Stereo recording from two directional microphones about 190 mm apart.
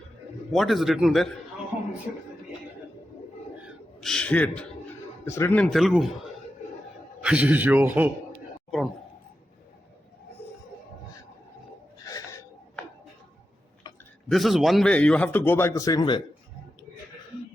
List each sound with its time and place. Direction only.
0.5 s speech: centre (ahead or behind)
3.6 s gasp: centre (ahead or behind)
5.2 s speech: 15° left (ahead or behind)
7.2 s a man's voice: 5° right (ahead or behind)
12.0 s gasp: 15° left (ahead or behind)
14.3 s speech: centre (ahead or behind); by 16.2 s 20° left (ahead or behind)